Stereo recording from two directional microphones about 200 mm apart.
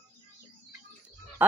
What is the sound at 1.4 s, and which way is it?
Speech, 10° right (ahead or behind).